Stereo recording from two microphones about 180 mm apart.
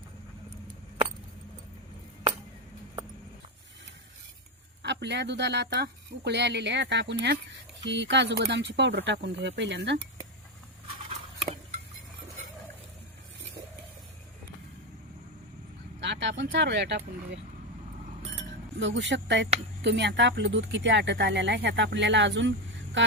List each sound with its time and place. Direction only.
4.8 s speech: 75° right (ahead or behind)
7.9 s speech: 80° right
16.2 s speech: 80° right
18.8 s speech: 90° right
23.0 s a sound: 90° right